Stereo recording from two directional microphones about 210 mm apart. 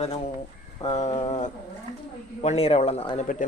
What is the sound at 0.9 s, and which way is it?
Speech, 30° left (ahead or behind).